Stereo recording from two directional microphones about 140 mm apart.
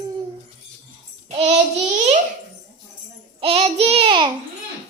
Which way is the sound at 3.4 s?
45° right (ahead or behind).